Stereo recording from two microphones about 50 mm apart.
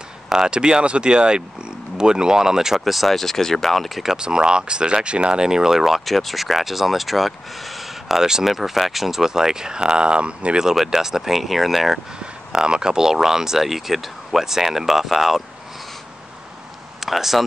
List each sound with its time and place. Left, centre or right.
0.3 s speech: centre
4.2 s speech: centre
10.6 s speech: centre
12.5 s speech: centre
17.0 s speech: centre